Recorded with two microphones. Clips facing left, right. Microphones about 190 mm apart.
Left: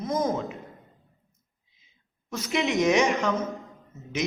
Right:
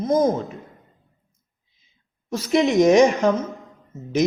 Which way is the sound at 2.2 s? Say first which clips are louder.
Right 8 dB; 35° right (ahead or behind).